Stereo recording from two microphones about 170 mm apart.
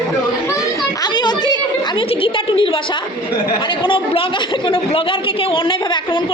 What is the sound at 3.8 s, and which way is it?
A woman's voice, 30° left (ahead or behind).